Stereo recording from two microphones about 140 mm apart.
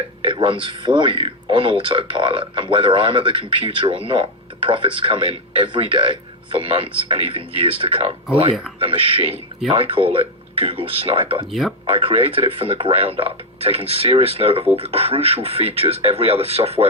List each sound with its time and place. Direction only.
0.2 s a man's voice: 40° right (ahead or behind)
9.3 s speech: 5° right (ahead or behind)
9.7 s a man's voice: 40° right (ahead or behind)